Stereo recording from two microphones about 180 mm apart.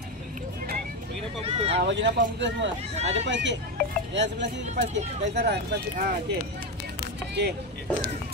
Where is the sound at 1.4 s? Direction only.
35° right (ahead or behind).